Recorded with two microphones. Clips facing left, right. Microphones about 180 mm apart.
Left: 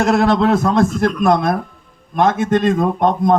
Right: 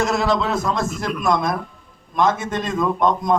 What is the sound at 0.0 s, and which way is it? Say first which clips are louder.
A man's voice: left 6 dB; 60° left (ahead or behind).